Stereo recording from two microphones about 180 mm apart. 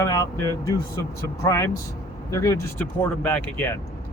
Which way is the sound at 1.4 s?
15° left (ahead or behind).